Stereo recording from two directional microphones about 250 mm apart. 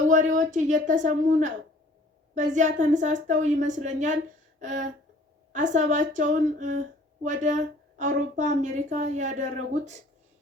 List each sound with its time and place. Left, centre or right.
0.1 s speech: right